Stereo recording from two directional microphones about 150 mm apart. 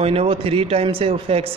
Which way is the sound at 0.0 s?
40° right (ahead or behind).